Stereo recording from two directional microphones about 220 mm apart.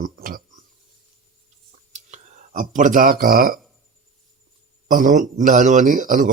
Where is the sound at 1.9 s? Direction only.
35° right (ahead or behind).